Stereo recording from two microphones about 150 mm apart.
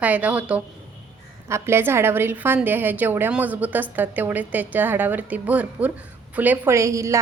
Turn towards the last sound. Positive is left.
turn(degrees=-20)  # may be behind; listen again after turning